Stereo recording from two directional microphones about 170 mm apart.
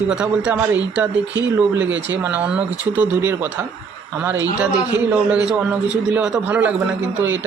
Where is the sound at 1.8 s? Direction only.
90° right.